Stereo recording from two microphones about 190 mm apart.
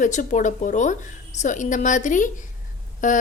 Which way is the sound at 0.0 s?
40° left (ahead or behind).